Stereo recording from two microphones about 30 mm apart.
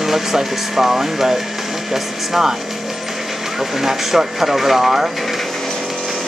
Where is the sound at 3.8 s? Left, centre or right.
Centre.